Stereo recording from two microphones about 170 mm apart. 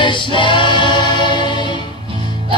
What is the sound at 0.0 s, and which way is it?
Music, 30° left (ahead or behind).